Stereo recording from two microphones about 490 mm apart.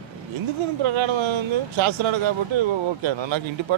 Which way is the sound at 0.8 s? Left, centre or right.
Right.